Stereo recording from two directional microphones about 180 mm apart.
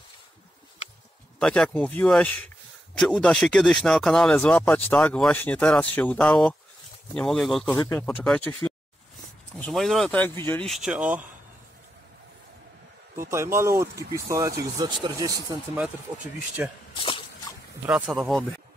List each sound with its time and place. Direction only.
1.4 s speech: 5° left (ahead or behind)
10.7 s speech: 5° right (ahead or behind)
13.1 s speech: 15° right (ahead or behind)
16.6 s speech: 10° right (ahead or behind)
17.0 s a sound: 30° left (ahead or behind)
17.8 s speech: 5° right (ahead or behind)